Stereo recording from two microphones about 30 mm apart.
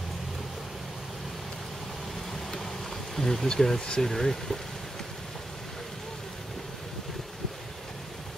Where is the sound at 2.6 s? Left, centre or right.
Centre.